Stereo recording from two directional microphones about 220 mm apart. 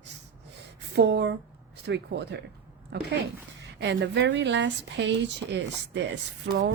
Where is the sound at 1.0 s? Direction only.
50° right (ahead or behind).